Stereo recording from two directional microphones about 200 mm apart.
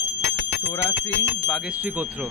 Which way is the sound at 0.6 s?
20° left (ahead or behind).